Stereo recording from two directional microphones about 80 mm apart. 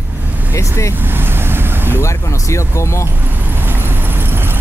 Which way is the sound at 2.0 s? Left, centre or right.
Left.